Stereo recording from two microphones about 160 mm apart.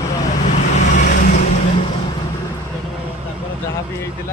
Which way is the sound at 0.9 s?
60° left (ahead or behind).